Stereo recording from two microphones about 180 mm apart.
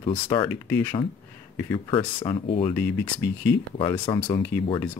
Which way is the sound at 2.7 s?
10° left (ahead or behind).